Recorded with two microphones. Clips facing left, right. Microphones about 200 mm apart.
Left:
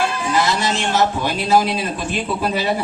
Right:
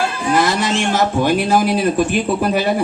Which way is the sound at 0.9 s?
50° right (ahead or behind).